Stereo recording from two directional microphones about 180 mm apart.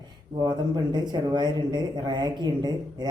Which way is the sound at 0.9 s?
25° right (ahead or behind).